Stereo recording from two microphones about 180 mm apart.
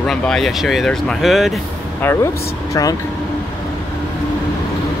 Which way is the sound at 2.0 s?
15° left (ahead or behind).